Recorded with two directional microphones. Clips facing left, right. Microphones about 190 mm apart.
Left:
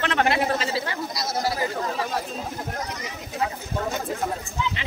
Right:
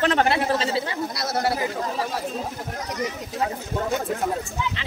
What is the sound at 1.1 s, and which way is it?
Speech, 60° right (ahead or behind).